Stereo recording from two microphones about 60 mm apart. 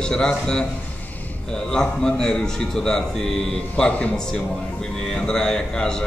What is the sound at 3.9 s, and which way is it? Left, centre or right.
Speech, left.